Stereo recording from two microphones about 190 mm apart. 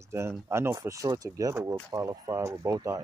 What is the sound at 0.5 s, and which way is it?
Speech, 15° right (ahead or behind).